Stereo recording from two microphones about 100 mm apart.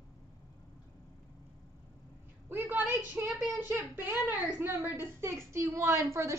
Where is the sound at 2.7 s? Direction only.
15° right (ahead or behind).